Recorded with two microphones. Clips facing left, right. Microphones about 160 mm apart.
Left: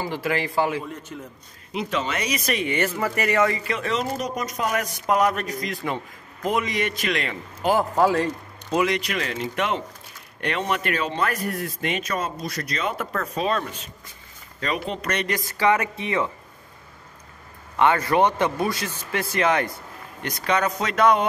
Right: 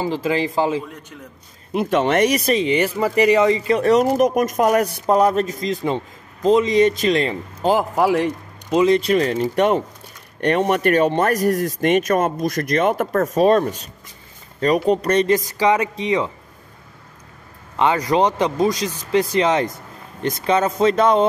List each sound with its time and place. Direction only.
0.0 s speech: 20° right (ahead or behind)
1.7 s speech: 50° right (ahead or behind)
2.4 s speech: 30° right (ahead or behind)
2.7 s speech: 15° right (ahead or behind)
3.7 s speech: 40° right (ahead or behind)
4.1 s speech: 50° right (ahead or behind)
4.8 s speech: 35° right (ahead or behind)
7.7 s a man's voice: 10° right (ahead or behind)
8.6 s speech: 25° right (ahead or behind)
17.7 s speech: 15° right (ahead or behind)